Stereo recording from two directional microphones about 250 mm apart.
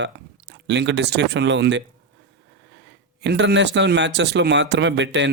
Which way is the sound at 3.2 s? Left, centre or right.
Right.